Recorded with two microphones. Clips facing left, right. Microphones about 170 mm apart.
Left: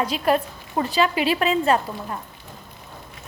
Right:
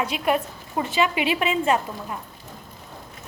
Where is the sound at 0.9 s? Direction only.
35° left (ahead or behind).